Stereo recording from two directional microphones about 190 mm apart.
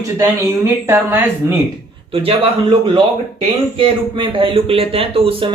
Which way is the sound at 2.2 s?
30° right (ahead or behind).